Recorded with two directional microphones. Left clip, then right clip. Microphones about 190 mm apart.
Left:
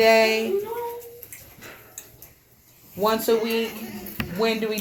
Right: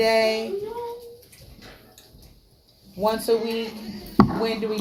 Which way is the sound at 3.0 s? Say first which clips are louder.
Left 1 dB; 50° left (ahead or behind).